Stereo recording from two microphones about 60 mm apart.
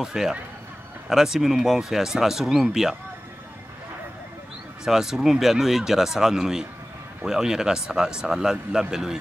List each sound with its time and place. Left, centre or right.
0.0 s speech: centre
4.8 s speech: centre